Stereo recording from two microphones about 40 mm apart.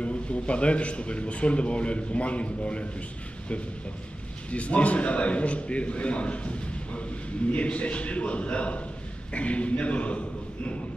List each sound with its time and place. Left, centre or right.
0.0 s a man's voice: left
4.5 s a man's voice: left